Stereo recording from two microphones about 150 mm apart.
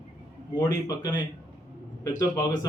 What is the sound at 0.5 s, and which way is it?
A man's voice, 25° left (ahead or behind).